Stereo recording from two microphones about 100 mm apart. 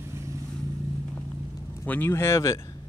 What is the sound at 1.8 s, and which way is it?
Speech, 20° left (ahead or behind).